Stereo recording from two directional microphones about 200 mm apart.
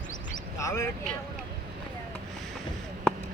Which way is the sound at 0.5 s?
15° left (ahead or behind).